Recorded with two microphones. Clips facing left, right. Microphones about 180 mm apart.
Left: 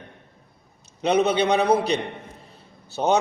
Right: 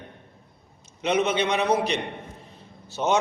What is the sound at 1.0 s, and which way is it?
Speech, 35° left (ahead or behind).